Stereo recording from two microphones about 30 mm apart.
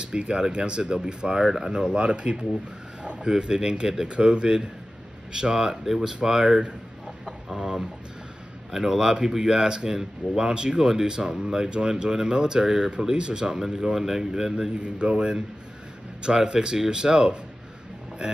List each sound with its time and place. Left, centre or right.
0.0 s speech: right
1.4 s speech: centre
1.7 s speech: right; by 6.0 s centre
6.4 s speech: right
8.7 s speech: centre
13.9 s speech: centre
14.7 s speech: right
16.5 s speech: right